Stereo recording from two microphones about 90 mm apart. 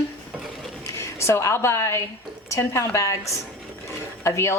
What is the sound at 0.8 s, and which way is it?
A woman's voice, 30° left (ahead or behind).